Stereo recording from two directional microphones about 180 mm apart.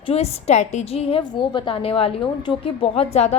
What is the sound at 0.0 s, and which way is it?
A woman's voice, 35° left (ahead or behind).